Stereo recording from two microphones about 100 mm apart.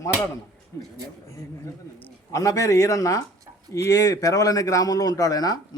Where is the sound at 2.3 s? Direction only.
35° left (ahead or behind).